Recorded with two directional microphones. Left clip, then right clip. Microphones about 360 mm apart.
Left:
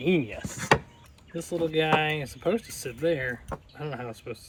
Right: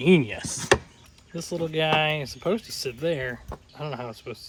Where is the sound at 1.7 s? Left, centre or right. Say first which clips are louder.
Right 2 dB; centre.